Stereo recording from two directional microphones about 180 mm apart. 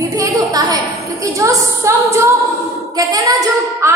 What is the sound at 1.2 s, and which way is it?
A woman's voice, 15° right (ahead or behind).